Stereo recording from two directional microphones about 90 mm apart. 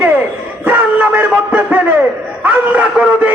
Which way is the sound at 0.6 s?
20° right (ahead or behind).